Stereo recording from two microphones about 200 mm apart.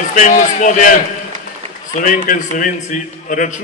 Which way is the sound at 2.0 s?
40° left (ahead or behind).